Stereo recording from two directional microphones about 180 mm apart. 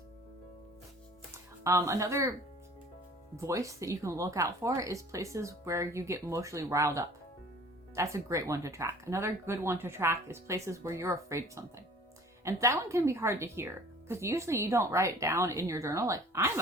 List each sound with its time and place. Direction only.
1.6 s speech: 15° right (ahead or behind)
3.3 s speech: 15° right (ahead or behind)